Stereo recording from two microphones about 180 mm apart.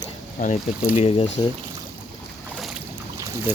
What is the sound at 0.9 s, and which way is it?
Speech, 35° left (ahead or behind).